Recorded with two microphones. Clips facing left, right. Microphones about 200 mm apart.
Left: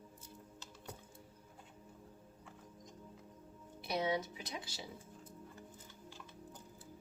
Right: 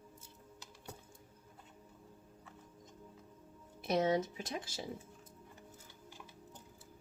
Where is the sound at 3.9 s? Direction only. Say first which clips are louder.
Right 5 dB; 45° right (ahead or behind).